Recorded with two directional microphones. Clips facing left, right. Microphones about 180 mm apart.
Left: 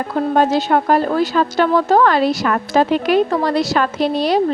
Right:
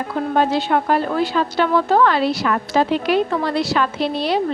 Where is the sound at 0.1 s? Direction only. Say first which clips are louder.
Left 3 dB; 45° left (ahead or behind).